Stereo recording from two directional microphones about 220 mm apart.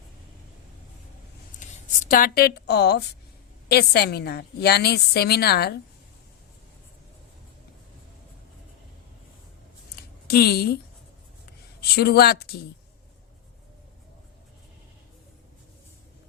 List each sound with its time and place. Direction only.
1.5 s a woman's voice: 35° left (ahead or behind)
9.9 s a sound: 45° left (ahead or behind)
11.8 s a woman's voice: 45° left (ahead or behind)